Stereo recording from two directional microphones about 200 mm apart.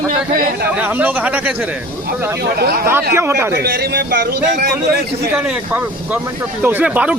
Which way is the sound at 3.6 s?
55° right (ahead or behind).